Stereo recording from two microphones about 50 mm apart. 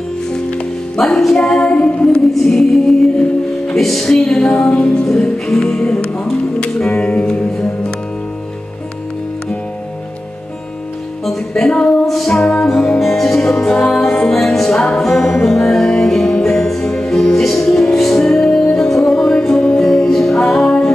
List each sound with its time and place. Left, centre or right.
0.9 s speech: centre
2.0 s speech: centre
3.7 s music: centre
4.1 s speech: centre
5.0 s speech: centre
7.0 s music: centre
11.2 s music: centre
11.7 s music: left
13.0 s music: centre